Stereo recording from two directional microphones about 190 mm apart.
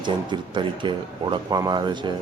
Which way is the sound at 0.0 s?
25° right (ahead or behind).